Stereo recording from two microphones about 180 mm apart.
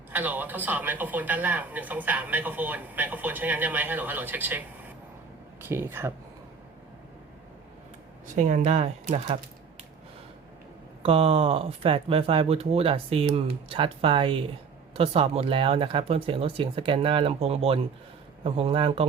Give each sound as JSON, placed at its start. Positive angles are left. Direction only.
{"t": 0.1, "sound": "speech", "side_deg": -10}
{"t": 8.4, "sound": "speech", "side_deg": -45}
{"t": 11.0, "sound": "speech", "side_deg": -30}